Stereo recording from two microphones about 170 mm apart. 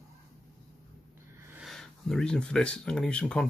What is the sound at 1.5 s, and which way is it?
Speech, centre (ahead or behind).